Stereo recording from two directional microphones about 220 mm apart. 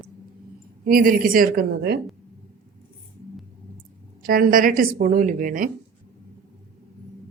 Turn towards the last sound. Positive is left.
turn(degrees=-40)  # may be behind; listen again after turning